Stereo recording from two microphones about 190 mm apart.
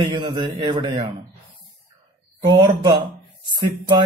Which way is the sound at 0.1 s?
25° right (ahead or behind).